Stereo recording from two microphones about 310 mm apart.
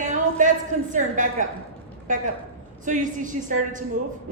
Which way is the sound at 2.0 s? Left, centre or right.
Right.